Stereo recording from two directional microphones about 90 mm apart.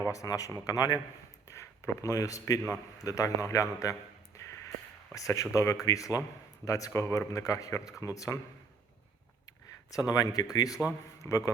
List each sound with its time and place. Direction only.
0.1 s a man's voice: 40° left (ahead or behind)
5.1 s a man's voice: 35° left (ahead or behind)
9.9 s a man's voice: 40° left (ahead or behind)